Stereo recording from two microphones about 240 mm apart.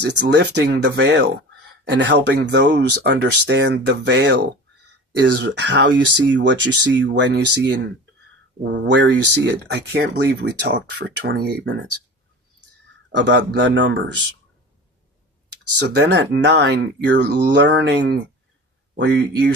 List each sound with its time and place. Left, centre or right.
0.0 s speech: right
13.1 s speech: right
15.8 s speech: right